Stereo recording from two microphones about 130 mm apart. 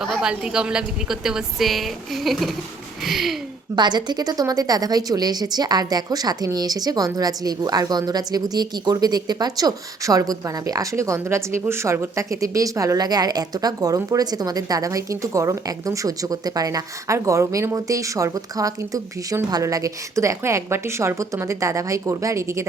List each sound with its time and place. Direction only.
0.0 s a woman's voice: 5° right (ahead or behind)
3.8 s speech: 35° right (ahead or behind)